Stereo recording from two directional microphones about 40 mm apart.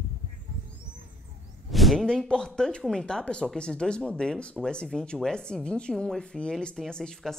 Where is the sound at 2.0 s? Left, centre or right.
Centre.